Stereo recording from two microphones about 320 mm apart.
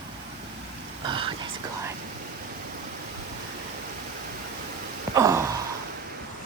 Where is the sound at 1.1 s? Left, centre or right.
Centre.